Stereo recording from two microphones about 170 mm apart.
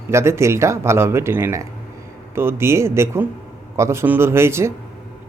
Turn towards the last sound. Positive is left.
turn(degrees=-15)  # may be behind; listen again after turning